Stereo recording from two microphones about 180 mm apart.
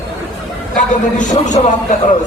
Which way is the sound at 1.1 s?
45° left (ahead or behind).